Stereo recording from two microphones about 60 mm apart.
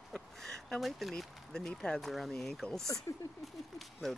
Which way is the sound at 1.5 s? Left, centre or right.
Centre.